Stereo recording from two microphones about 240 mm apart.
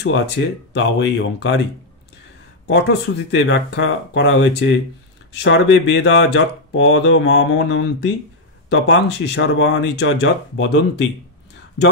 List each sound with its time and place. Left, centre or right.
0.0 s speech: left
2.6 s speech: left